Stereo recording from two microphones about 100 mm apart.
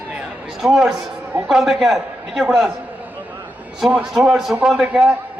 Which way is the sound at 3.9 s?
10° right (ahead or behind).